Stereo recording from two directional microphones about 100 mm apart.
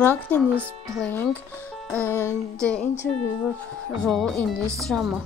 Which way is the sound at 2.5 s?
10° left (ahead or behind).